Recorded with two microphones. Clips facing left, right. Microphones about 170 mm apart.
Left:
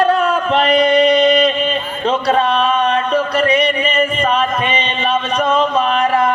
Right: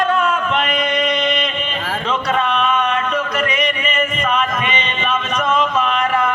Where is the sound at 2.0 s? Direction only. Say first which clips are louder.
Left 5 dB; 35° left (ahead or behind).